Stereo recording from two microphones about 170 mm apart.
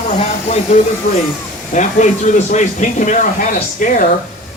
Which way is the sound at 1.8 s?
45° left (ahead or behind).